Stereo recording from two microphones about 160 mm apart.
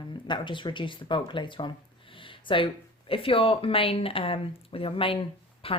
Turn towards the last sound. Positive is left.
turn(degrees=35)  # may be behind; listen again after turning